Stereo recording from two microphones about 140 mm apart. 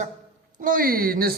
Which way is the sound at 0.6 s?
80° right.